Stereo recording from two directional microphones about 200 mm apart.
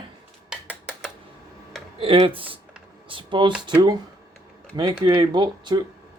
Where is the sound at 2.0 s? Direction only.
25° right (ahead or behind).